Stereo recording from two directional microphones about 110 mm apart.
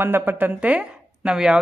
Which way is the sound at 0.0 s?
20° right (ahead or behind).